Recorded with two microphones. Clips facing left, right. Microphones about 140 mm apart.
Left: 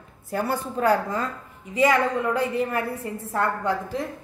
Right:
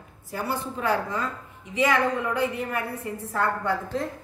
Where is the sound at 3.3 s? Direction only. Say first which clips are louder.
Left 1 dB; 20° left (ahead or behind).